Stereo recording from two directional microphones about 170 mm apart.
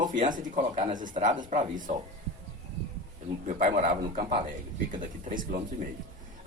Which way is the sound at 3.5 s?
50° right (ahead or behind).